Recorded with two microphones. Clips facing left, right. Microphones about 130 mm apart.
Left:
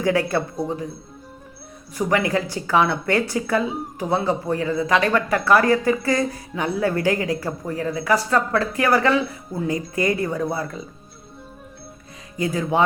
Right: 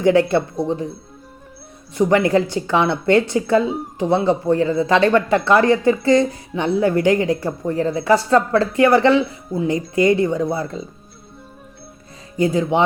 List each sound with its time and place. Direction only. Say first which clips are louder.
0.0 s speech: right 6 dB; 25° right (ahead or behind)
2.0 s speech: right 6 dB; 25° right (ahead or behind)
12.4 s speech: right 5 dB; 25° right (ahead or behind)